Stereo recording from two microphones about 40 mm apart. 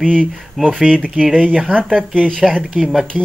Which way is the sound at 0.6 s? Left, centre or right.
Centre.